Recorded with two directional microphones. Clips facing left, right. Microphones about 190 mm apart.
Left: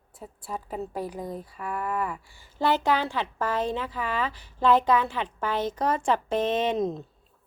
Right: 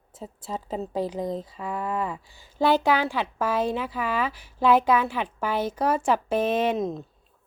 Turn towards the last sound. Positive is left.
turn(degrees=0)  # may be behind; listen again after turning